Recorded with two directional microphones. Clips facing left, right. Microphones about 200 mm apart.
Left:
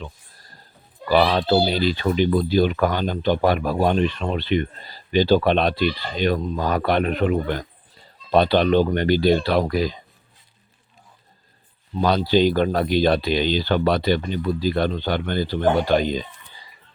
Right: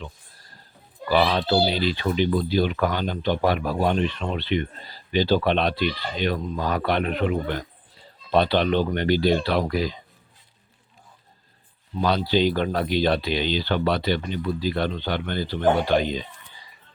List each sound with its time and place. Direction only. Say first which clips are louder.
1.3 s speech: left 3 dB; 45° left (ahead or behind)
11.9 s speech: left 3 dB; 45° left (ahead or behind)